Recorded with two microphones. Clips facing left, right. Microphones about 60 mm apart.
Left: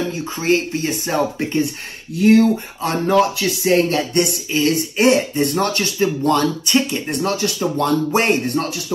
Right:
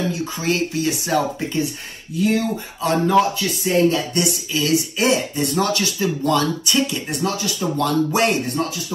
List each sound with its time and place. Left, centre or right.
0.1 s speech: left
2.1 s speech: left
7.7 s speech: left